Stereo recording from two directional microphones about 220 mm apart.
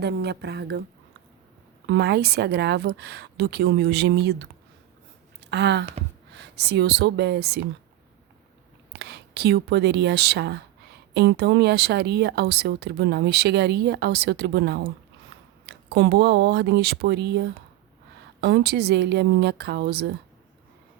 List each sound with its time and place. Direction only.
0.0 s speech: 50° right (ahead or behind)
1.9 s speech: 50° right (ahead or behind)
5.5 s a sound: 50° right (ahead or behind)
6.3 s speech: 50° right (ahead or behind)
8.9 s speech: 50° right (ahead or behind)